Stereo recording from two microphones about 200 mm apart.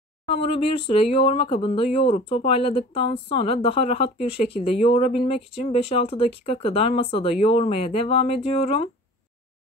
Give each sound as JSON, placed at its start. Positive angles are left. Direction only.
{"t": 0.3, "sound": "speech", "side_deg": 30}